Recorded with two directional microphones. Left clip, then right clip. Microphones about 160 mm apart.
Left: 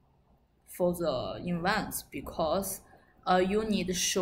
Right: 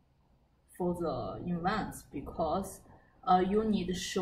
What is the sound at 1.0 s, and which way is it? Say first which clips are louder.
Speech: left 4 dB; 15° left (ahead or behind).